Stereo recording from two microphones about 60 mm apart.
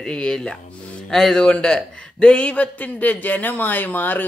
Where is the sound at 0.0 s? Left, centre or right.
Centre.